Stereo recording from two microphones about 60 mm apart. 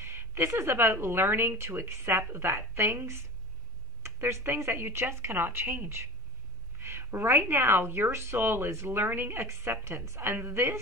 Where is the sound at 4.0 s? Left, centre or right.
Right.